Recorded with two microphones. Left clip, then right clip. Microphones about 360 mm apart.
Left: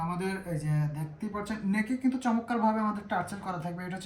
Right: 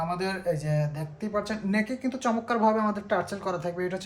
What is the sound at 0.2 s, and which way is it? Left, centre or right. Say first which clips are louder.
Speech: right 6 dB; right.